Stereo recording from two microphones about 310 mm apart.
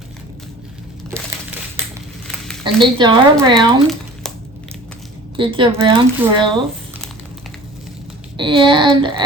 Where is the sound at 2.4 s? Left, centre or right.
Centre.